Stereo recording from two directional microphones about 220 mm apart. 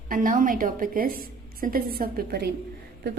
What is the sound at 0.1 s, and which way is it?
A woman's voice, 35° right (ahead or behind).